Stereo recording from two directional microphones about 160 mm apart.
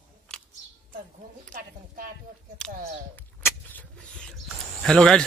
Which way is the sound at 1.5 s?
60° right (ahead or behind).